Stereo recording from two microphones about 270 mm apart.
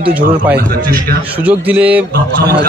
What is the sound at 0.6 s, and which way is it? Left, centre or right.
Speech, right.